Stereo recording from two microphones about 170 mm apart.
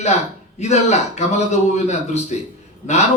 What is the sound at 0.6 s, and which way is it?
A man's voice, 45° left (ahead or behind).